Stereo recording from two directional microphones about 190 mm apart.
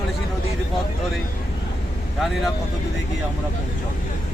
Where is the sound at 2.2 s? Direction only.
Centre (ahead or behind).